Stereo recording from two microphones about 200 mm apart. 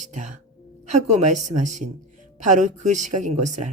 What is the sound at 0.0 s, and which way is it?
Speech, 35° right (ahead or behind).